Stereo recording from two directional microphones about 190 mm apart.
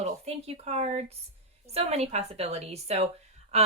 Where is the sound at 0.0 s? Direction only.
35° right (ahead or behind).